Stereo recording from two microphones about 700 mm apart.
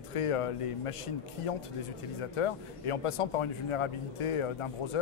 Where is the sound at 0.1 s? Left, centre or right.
Left.